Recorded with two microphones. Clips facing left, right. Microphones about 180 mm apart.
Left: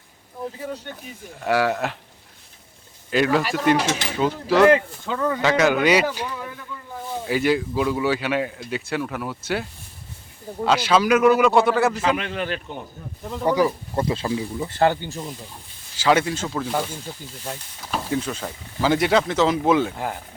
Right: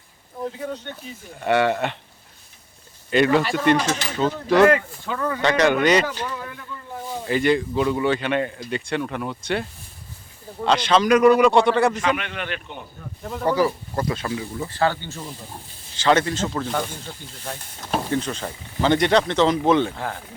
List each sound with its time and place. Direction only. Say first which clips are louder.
0.4 s speech: right 2 dB; 5° left (ahead or behind)
3.1 s speech: right 2 dB; centre (ahead or behind)
4.6 s speech: left 3 dB; 20° left (ahead or behind)
5.4 s speech: right 1 dB; 5° left (ahead or behind)
12.1 s speech: left 3 dB; 35° left (ahead or behind)
13.4 s speech: left 1 dB; 15° left (ahead or behind)
13.9 s speech: left 2 dB; 25° left (ahead or behind)
16.0 s speech: even; 10° left (ahead or behind)
18.1 s speech: right 1 dB; 5° left (ahead or behind)